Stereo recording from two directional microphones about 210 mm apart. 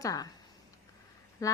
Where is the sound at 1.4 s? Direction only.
15° left (ahead or behind).